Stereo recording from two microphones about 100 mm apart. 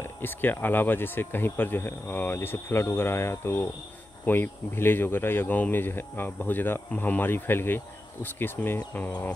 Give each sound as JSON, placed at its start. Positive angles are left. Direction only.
{"t": 0.0, "sound": "speech", "side_deg": 20}